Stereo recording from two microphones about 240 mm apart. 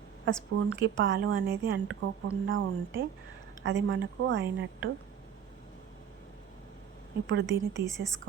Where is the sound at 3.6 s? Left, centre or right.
Right.